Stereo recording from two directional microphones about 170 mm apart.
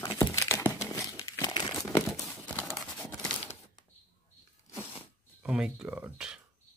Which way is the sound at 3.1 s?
5° left (ahead or behind).